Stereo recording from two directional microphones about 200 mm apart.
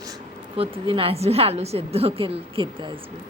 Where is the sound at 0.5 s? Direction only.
30° right (ahead or behind).